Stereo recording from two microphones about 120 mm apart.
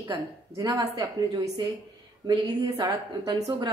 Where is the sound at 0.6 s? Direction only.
30° right (ahead or behind).